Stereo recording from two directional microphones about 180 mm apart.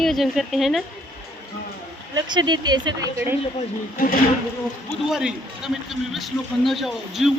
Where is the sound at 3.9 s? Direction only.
50° left (ahead or behind).